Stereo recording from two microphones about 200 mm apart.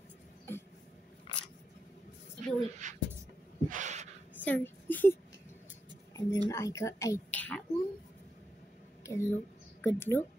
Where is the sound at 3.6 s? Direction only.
40° right (ahead or behind).